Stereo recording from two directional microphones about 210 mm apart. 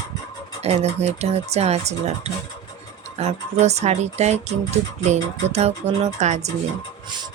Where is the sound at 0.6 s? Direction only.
30° right (ahead or behind).